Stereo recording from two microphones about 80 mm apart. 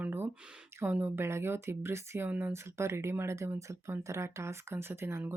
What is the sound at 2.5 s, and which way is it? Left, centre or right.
Speech, right.